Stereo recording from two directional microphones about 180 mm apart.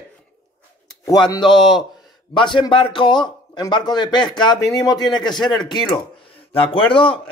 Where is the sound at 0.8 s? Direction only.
20° left (ahead or behind).